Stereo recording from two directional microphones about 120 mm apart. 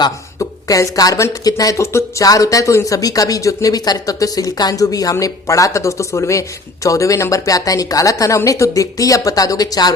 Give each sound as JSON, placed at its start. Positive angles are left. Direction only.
{"t": 0.0, "sound": "speech", "side_deg": 30}